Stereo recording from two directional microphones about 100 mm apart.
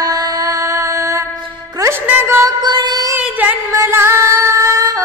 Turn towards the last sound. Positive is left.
turn(degrees=-35)  # may be behind; listen again after turning